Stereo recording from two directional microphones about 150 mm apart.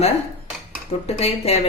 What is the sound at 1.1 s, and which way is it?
Speech, 40° left (ahead or behind).